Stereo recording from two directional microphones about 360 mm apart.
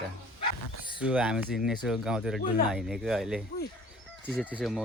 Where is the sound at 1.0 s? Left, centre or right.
Centre.